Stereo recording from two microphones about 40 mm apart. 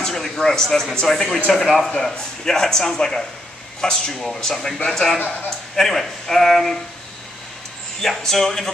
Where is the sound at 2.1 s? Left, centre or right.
Centre.